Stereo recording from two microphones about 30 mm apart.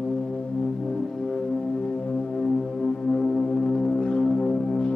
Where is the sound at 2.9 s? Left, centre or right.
Left.